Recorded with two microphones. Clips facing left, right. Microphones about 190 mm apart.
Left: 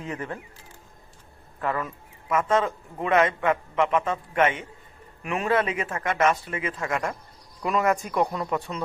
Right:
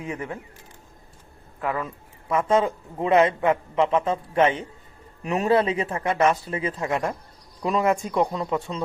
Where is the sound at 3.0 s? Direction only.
25° right (ahead or behind).